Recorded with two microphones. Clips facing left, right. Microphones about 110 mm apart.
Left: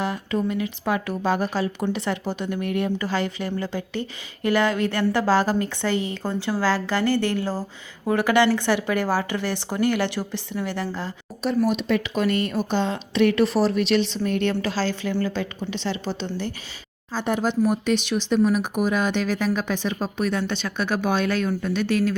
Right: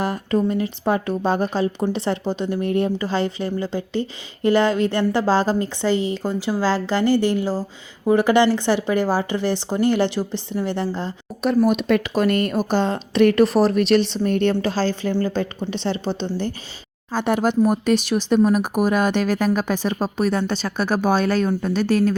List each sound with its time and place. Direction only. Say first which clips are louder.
0.0 s a woman's voice: right 4 dB; 45° right (ahead or behind); by 11.1 s 25° right (ahead or behind)
11.4 s speech: right 4 dB; 60° right (ahead or behind); by 16.6 s 35° right (ahead or behind)
17.1 s speech: right 4 dB; 60° right (ahead or behind); by 22.1 s 40° right (ahead or behind)